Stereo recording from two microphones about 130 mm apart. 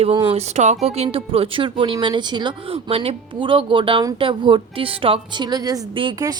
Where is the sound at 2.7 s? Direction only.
50° right (ahead or behind).